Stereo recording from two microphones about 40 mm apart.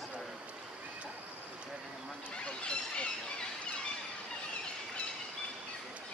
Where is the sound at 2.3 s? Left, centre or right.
Left.